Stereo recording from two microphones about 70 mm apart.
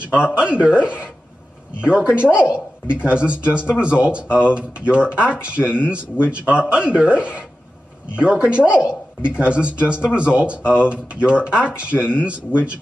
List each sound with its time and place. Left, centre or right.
0.0 s speech: centre
8.5 s speech: centre
10.6 s speech: left
10.9 s speech: centre
11.9 s speech: left